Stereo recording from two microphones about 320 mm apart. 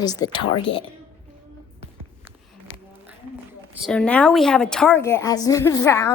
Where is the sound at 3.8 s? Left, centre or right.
Centre.